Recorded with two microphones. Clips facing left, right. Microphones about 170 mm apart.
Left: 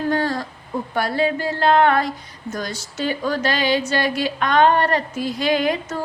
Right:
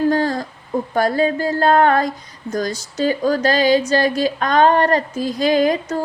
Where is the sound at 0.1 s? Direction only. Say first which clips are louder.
Right 3 dB; 40° right (ahead or behind).